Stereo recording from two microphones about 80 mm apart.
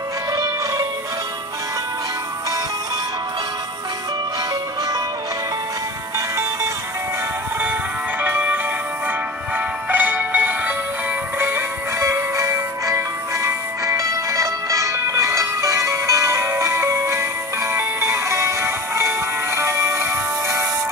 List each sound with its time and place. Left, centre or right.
0.3 s music: right
6.1 s music: right
8.2 s music: right
9.8 s music: right